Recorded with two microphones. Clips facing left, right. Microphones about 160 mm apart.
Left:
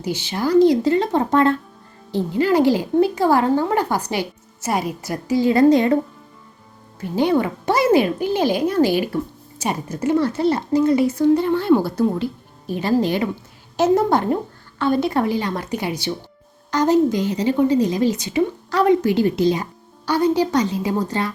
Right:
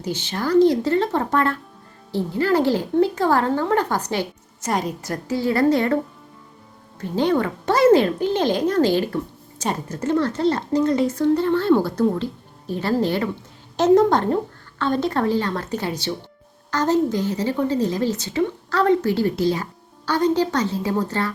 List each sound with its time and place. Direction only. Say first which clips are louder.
0.0 s speech: left 3 dB; 10° left (ahead or behind)
7.0 s speech: left 2 dB; 10° left (ahead or behind)